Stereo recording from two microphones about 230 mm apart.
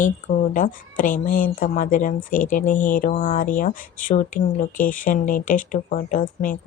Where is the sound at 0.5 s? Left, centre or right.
Left.